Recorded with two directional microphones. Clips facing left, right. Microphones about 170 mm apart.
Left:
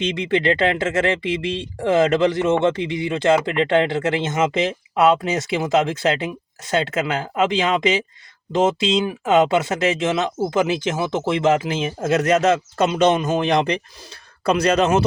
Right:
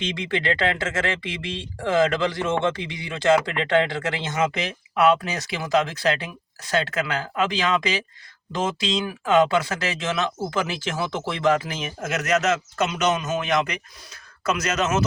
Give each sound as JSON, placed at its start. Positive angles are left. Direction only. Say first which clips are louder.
{"t": 0.0, "sound": "speech", "louder": "left 6 dB", "side_deg": 20}